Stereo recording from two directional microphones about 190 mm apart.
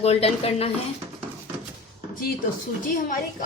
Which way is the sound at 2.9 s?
45° left (ahead or behind).